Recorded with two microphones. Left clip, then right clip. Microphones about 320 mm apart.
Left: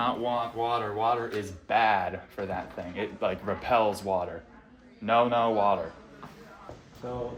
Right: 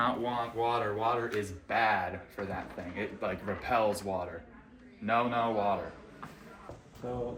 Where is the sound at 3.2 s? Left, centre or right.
Left.